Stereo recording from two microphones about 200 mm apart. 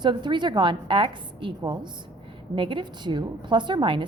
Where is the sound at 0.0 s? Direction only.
20° right (ahead or behind).